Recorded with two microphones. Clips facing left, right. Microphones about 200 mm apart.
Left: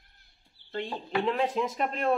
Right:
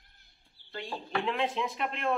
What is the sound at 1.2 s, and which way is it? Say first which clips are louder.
Speech: left 4 dB; 40° left (ahead or behind).